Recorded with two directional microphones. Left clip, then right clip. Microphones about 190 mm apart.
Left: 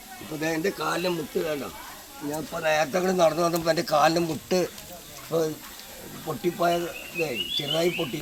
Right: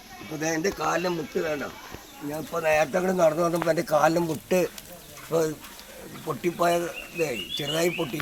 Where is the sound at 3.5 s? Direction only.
25° right (ahead or behind).